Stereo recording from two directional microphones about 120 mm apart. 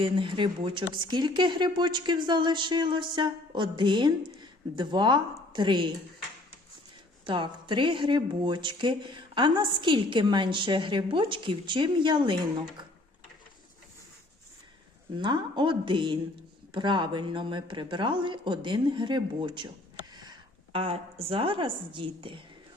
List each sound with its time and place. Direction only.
0.0 s speech: 45° right (ahead or behind)
7.3 s speech: 45° right (ahead or behind)
15.2 s speech: 40° right (ahead or behind)
20.7 s speech: 55° right (ahead or behind)